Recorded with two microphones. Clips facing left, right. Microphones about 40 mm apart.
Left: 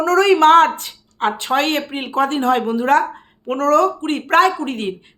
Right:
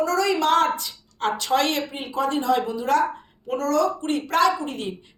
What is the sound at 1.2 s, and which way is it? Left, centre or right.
Speech, left.